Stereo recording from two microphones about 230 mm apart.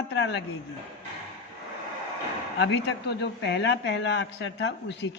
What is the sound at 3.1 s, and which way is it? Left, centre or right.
A woman's voice, left.